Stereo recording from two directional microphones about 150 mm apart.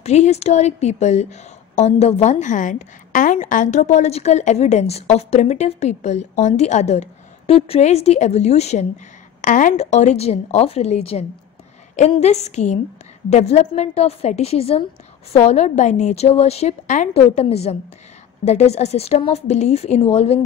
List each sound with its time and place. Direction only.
0.0 s a woman's voice: 45° left (ahead or behind)
9.4 s a woman's voice: 60° left (ahead or behind); by 20.3 s 45° left (ahead or behind)